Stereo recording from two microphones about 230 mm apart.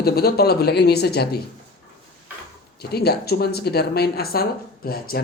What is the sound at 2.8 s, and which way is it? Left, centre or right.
Speech, left.